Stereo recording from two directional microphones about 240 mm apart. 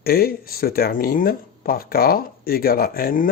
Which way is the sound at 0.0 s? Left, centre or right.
Left.